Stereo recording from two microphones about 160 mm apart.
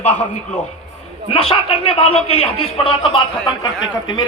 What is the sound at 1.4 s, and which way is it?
Speech, 35° left (ahead or behind).